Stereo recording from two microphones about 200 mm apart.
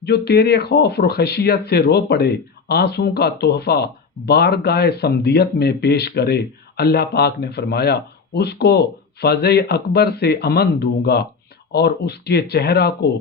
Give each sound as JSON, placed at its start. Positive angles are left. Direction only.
{"t": 0.0, "sound": "speech", "side_deg": 55}